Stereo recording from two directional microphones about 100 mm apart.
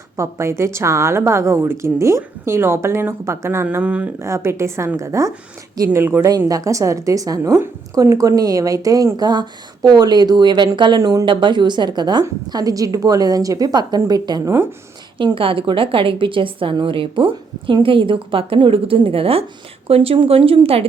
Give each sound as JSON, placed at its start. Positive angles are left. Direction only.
{"t": 0.2, "sound": "a woman's voice", "side_deg": -30}
{"t": 4.2, "sound": "a woman's voice", "side_deg": -30}
{"t": 11.3, "sound": "a woman's voice", "side_deg": -55}
{"t": 15.2, "sound": "a woman's voice", "side_deg": -60}